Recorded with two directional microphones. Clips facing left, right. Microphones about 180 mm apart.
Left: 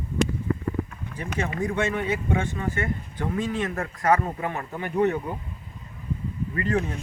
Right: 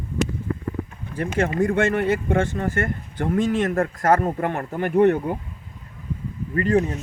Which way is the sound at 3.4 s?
90° right.